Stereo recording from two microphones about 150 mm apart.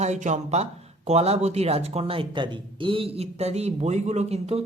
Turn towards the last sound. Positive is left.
turn(degrees=-45)  # may be behind; listen again after turning